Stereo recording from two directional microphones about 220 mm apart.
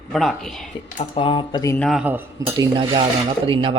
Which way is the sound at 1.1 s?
25° left (ahead or behind).